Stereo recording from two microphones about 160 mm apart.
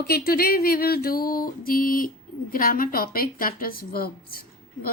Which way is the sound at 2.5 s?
60° left (ahead or behind).